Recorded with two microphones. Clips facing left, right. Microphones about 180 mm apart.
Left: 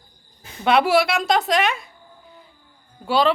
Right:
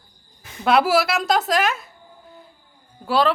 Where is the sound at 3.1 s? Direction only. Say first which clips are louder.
Left 1 dB; centre (ahead or behind).